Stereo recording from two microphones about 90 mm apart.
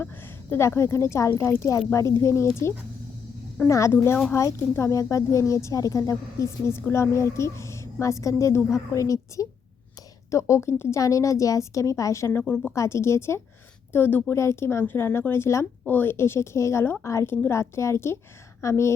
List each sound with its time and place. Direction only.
0.5 s a woman's voice: 30° left (ahead or behind)
12.4 s a woman's voice: 20° left (ahead or behind)
12.7 s a woman's voice: 30° left (ahead or behind)